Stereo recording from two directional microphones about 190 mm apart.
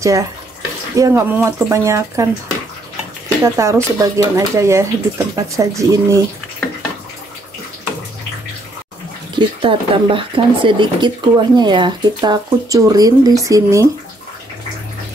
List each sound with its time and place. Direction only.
0.0 s speech: 15° right (ahead or behind)
3.4 s speech: 15° right (ahead or behind)
9.3 s speech: 25° right (ahead or behind)